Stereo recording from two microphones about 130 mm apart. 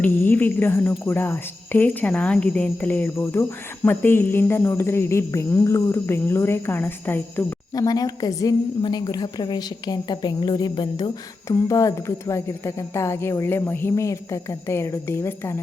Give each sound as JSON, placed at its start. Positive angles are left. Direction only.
{"t": 0.0, "sound": "a woman's voice", "side_deg": 15}
{"t": 7.8, "sound": "a woman's voice", "side_deg": 30}